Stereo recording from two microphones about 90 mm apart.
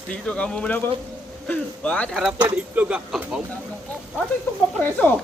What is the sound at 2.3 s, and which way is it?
Speech, 20° right (ahead or behind).